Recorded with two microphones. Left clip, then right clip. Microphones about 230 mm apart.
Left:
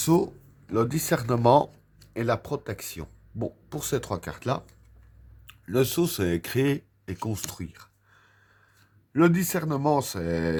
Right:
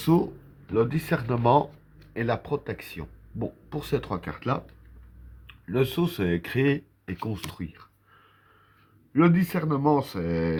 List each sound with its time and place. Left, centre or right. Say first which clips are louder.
0.0 s speech: left 1 dB; left
9.1 s speech: even; left